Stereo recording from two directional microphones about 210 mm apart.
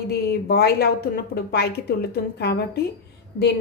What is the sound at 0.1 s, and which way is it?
A woman's voice, 50° left (ahead or behind).